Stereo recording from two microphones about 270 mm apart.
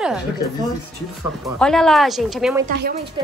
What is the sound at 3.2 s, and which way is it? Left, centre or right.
Speech, centre.